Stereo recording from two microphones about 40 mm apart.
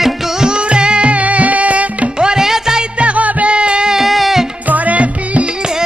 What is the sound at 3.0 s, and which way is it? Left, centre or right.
Music, right.